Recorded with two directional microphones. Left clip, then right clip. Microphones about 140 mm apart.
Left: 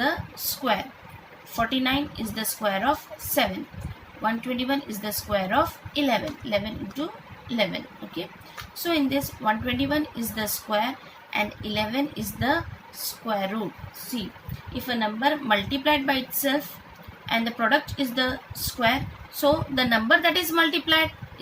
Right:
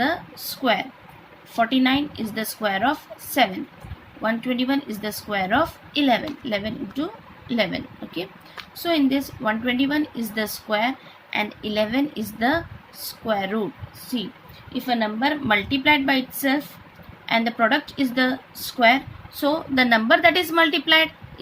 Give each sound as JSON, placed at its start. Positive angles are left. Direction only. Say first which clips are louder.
{"t": 0.6, "sound": "a woman's voice", "louder": "right 4 dB", "side_deg": -40}
{"t": 14.8, "sound": "a woman's voice", "louder": "right 2 dB", "side_deg": -45}
{"t": 19.4, "sound": "a woman's voice", "louder": "right 2 dB", "side_deg": -40}